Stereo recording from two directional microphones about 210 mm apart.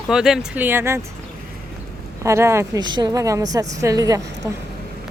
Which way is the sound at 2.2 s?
15° right (ahead or behind).